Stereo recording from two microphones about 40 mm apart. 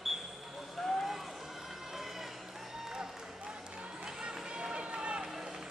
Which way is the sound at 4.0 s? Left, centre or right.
Right.